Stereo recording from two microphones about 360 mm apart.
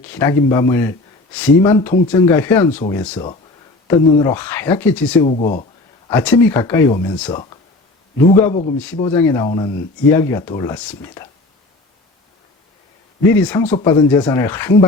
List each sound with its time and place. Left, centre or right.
0.0 s speech: centre
1.6 s speech: centre
5.3 s speech: centre
6.1 s speech: centre
9.5 s speech: left
10.1 s speech: centre
13.7 s speech: centre